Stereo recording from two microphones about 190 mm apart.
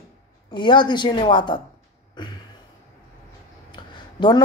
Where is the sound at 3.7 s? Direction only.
25° left (ahead or behind).